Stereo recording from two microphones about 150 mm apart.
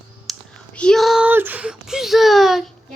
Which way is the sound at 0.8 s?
5° left (ahead or behind).